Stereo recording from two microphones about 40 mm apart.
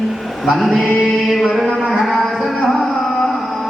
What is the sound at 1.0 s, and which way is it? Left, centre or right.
Music, centre.